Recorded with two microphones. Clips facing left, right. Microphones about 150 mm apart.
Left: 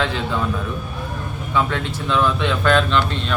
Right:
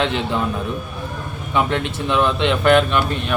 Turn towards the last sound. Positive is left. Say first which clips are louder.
# even
turn(degrees=-15)  # may be behind; listen again after turning